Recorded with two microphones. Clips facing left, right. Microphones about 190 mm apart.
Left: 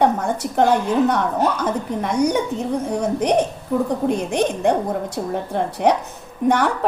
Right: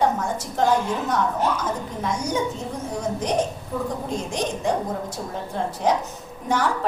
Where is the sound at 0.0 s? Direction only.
60° left (ahead or behind).